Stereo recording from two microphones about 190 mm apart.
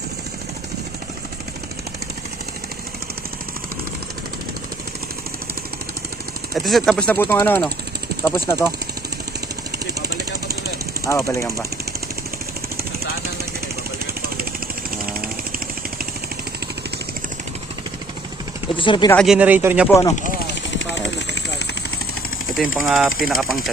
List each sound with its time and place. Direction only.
6.5 s speech: centre (ahead or behind)
11.0 s speech: 15° left (ahead or behind)
18.8 s speech: 25° left (ahead or behind)
19.1 s a man's voice: centre (ahead or behind)
19.9 s speech: 15° left (ahead or behind)
20.1 s speech: 45° left (ahead or behind)
20.5 s a sound: 70° left (ahead or behind)
22.5 s speech: centre (ahead or behind)